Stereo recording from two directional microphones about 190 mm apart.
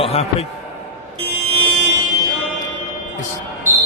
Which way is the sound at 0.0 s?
30° left (ahead or behind).